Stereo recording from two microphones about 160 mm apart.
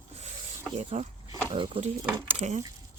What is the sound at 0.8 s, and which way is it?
Speech, 45° right (ahead or behind).